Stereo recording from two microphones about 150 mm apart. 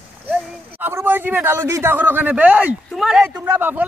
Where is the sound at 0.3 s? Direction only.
15° right (ahead or behind).